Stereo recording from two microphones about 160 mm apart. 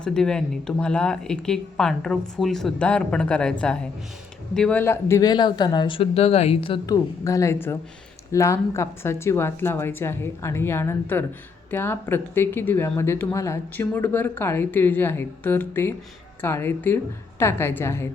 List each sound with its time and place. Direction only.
0.0 s speech: 5° left (ahead or behind)
4.5 s speech: 5° left (ahead or behind); by 6.7 s 35° left (ahead or behind)
6.8 s speech: 20° left (ahead or behind)